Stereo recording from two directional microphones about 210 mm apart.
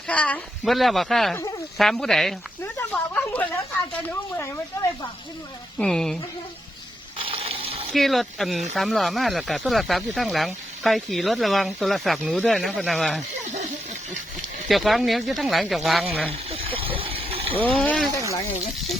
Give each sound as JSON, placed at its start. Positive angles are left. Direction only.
{"t": 0.1, "sound": "speech", "side_deg": 5}
{"t": 1.4, "sound": "a sound", "side_deg": 15}
{"t": 1.8, "sound": "speech", "side_deg": 0}
{"t": 2.7, "sound": "a sound", "side_deg": 5}
{"t": 4.1, "sound": "speech", "side_deg": 10}
{"t": 7.2, "sound": "gush", "side_deg": -25}
{"t": 7.9, "sound": "speech", "side_deg": 0}
{"t": 14.7, "sound": "speech", "side_deg": 0}
{"t": 16.5, "sound": "vehicle", "side_deg": -25}
{"t": 17.6, "sound": "speech", "side_deg": 5}